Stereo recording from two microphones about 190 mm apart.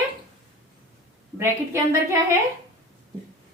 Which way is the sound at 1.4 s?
15° right (ahead or behind).